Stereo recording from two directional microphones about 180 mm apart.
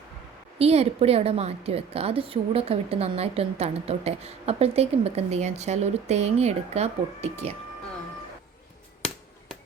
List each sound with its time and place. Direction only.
0.6 s a woman's voice: 35° right (ahead or behind)
9.0 s hammer: 5° left (ahead or behind)